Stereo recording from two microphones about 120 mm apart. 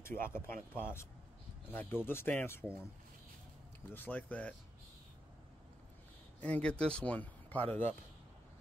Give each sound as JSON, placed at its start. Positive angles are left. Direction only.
{"t": 0.0, "sound": "speech", "side_deg": 20}
{"t": 3.9, "sound": "speech", "side_deg": 15}
{"t": 6.4, "sound": "speech", "side_deg": 10}